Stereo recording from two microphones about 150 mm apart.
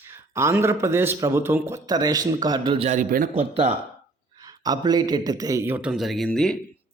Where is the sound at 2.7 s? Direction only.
50° right (ahead or behind).